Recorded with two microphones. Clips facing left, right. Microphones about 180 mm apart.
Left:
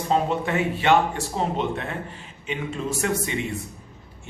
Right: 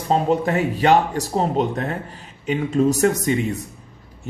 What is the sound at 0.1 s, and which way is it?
Speech, 40° right (ahead or behind).